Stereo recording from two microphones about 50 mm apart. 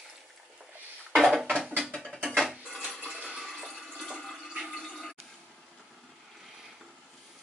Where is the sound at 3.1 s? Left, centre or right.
Centre.